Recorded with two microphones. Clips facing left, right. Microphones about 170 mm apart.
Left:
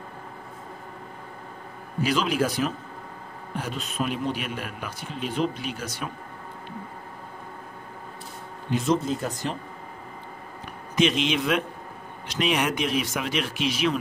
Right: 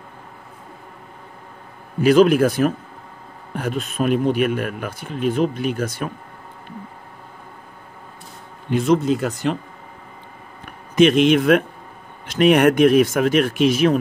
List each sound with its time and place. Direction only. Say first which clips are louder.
2.0 s a man's voice: right 11 dB; 55° right (ahead or behind)
8.6 s speech: right 7 dB; 60° right (ahead or behind)
11.0 s a man's voice: right 9 dB; 55° right (ahead or behind)